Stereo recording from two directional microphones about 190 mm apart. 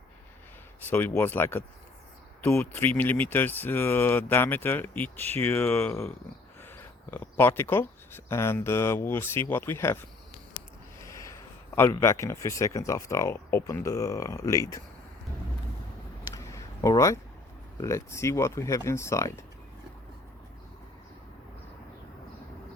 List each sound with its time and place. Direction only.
0.8 s speech: 10° left (ahead or behind)
11.0 s a man's voice: 15° left (ahead or behind)
16.3 s a sound: 15° left (ahead or behind)
17.7 s speech: 15° left (ahead or behind)